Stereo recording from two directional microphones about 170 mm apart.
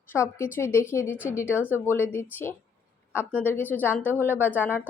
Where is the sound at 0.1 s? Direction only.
15° left (ahead or behind).